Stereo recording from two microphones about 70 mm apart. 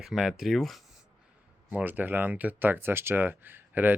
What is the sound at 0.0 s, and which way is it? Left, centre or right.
Speech, centre.